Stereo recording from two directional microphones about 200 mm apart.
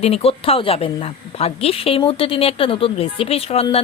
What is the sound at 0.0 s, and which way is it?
A woman's voice, 30° left (ahead or behind).